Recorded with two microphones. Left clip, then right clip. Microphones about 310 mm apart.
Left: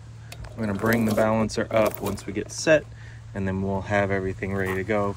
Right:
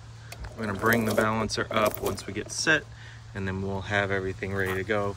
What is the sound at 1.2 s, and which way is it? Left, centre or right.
Speech, centre.